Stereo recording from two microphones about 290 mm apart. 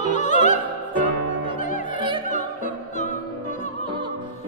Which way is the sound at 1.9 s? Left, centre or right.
Centre.